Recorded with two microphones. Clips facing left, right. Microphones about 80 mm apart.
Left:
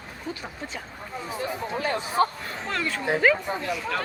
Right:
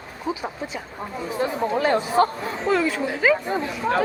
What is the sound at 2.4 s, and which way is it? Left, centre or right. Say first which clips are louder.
Speech: right 8 dB; centre.